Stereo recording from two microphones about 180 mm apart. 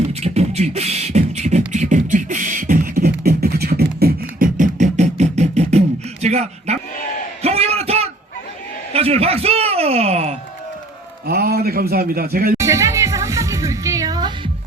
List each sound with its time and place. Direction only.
0.1 s beatboxing: 35° right (ahead or behind)
6.2 s a sound: 35° right (ahead or behind)
7.4 s bellow: 35° right (ahead or behind)
8.9 s speech: 35° right (ahead or behind)
11.3 s a man's voice: 60° right (ahead or behind)
12.5 s music: 15° right (ahead or behind)